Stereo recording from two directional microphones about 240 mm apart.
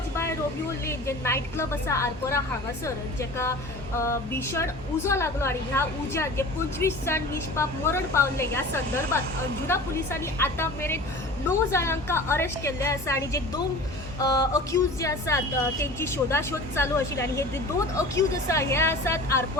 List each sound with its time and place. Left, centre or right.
0.9 s a woman's voice: centre
9.6 s a woman's voice: centre